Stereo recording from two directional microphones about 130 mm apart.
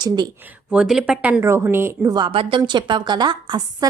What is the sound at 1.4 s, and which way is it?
Speech, 20° right (ahead or behind).